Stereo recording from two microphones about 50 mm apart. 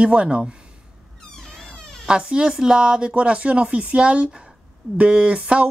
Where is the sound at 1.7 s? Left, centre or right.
Centre.